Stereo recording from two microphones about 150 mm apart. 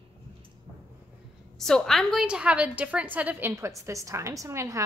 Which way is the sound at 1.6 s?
Centre (ahead or behind).